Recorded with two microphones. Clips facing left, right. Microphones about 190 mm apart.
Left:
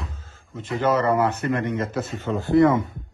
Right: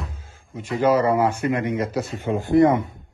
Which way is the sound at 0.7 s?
5° right (ahead or behind).